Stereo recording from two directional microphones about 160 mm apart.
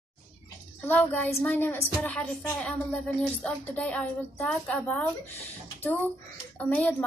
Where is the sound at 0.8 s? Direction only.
10° left (ahead or behind).